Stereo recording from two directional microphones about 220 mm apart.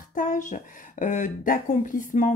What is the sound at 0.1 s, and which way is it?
Speech, 35° left (ahead or behind).